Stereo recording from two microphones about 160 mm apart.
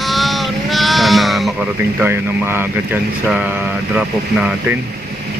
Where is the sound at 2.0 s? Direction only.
15° right (ahead or behind).